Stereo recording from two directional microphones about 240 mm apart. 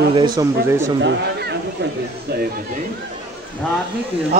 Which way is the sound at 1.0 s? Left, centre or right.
Right.